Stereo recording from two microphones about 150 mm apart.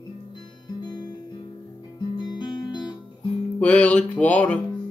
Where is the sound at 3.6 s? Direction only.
10° left (ahead or behind).